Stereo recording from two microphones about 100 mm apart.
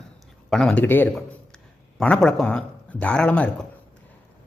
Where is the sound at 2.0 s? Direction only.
5° left (ahead or behind).